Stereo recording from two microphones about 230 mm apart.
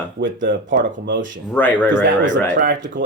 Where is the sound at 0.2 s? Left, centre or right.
Right.